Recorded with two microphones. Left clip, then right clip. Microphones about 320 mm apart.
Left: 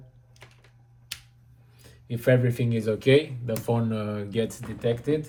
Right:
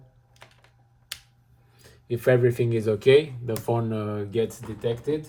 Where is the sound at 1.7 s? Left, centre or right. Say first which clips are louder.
Right 7 dB; right.